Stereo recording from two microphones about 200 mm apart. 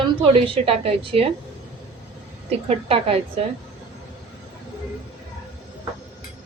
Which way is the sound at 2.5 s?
30° right (ahead or behind).